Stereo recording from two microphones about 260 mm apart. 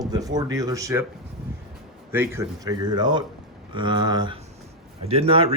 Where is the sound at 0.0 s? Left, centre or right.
Centre.